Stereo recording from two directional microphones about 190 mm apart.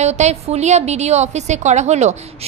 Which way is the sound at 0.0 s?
35° right (ahead or behind).